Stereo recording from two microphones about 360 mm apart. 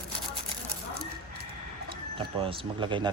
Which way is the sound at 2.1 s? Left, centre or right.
Centre.